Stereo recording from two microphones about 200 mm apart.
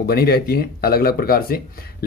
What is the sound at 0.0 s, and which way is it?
Speech, 50° left (ahead or behind).